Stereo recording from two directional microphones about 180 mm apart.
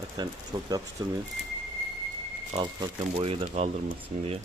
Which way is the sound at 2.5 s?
30° right (ahead or behind).